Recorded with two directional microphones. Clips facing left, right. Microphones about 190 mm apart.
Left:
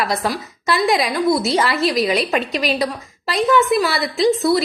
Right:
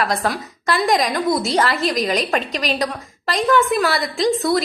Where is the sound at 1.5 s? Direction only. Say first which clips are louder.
Left 1 dB; 5° left (ahead or behind).